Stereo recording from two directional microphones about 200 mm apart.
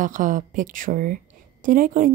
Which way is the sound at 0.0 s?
40° right (ahead or behind).